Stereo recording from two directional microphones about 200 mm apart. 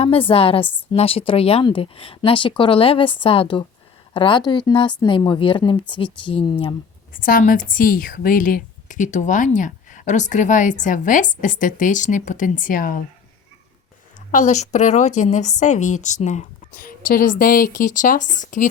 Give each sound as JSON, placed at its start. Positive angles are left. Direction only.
{"t": 0.0, "sound": "speech", "side_deg": 25}
{"t": 7.1, "sound": "speech", "side_deg": 45}
{"t": 14.3, "sound": "speech", "side_deg": 35}